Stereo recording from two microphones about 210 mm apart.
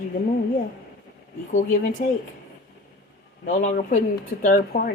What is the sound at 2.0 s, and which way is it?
Speech, 40° left (ahead or behind).